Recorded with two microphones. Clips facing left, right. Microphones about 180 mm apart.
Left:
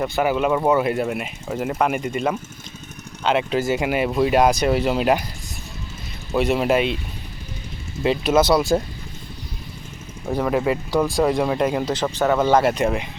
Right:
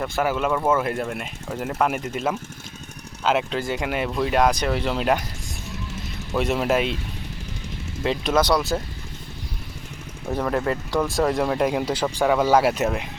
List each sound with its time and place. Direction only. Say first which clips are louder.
0.0 s speech: left 3 dB; 5° left (ahead or behind)
3.5 s speech: left 5 dB; 10° left (ahead or behind)
6.3 s speech: left 3 dB; 5° left (ahead or behind)
8.0 s speech: left 4 dB; 5° left (ahead or behind)
10.2 s speech: left 3 dB; 5° left (ahead or behind)